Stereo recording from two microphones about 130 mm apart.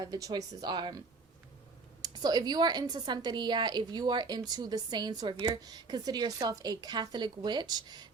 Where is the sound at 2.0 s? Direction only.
30° right (ahead or behind).